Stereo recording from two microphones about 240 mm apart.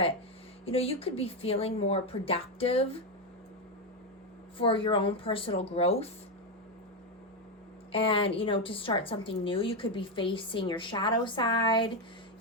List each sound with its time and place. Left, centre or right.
0.6 s a woman's voice: left
4.5 s a woman's voice: left
7.9 s a woman's voice: left